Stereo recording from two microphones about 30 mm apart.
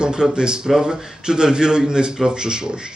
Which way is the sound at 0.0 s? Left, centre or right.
Right.